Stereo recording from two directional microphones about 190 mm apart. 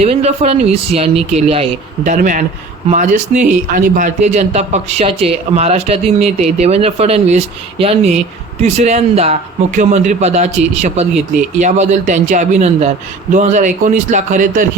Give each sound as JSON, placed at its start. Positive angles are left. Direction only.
{"t": 0.0, "sound": "a man's voice", "side_deg": -35}
{"t": 2.0, "sound": "a man's voice", "side_deg": -45}